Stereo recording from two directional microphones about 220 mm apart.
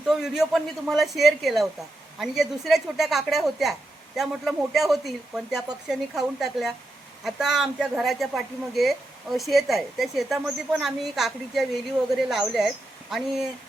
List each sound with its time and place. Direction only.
0.0 s a woman's voice: centre (ahead or behind)